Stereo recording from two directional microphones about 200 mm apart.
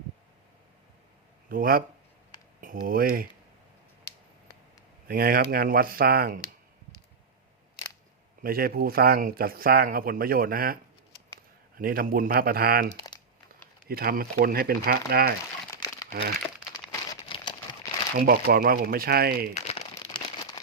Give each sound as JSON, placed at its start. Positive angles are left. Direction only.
{"t": 1.5, "sound": "speech", "side_deg": -45}
{"t": 5.0, "sound": "speech", "side_deg": -50}
{"t": 8.4, "sound": "speech", "side_deg": -50}
{"t": 11.8, "sound": "speech", "side_deg": -45}
{"t": 13.0, "sound": "crumpling", "side_deg": 20}
{"t": 13.7, "sound": "speech", "side_deg": -50}
{"t": 15.7, "sound": "crumpling", "side_deg": 15}
{"t": 17.2, "sound": "crumpling", "side_deg": 25}
{"t": 18.3, "sound": "speech", "side_deg": -50}
{"t": 19.5, "sound": "a sound", "side_deg": 30}